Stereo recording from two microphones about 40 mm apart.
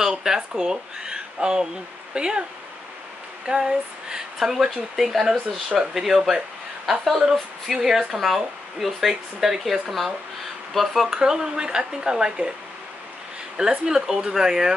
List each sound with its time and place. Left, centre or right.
0.0 s speech: centre
3.5 s a sound: centre
4.5 s speech: centre
11.1 s speech: centre
13.6 s speech: centre